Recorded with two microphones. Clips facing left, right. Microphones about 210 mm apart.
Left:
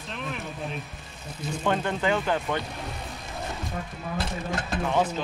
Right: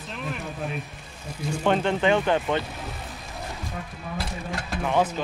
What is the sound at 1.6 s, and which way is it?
Speech, 20° right (ahead or behind).